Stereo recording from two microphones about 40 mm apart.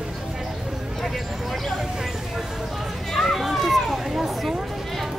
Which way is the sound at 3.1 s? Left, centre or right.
Centre.